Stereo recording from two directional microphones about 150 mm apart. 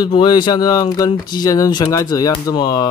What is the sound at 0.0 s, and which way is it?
Speech, 30° left (ahead or behind).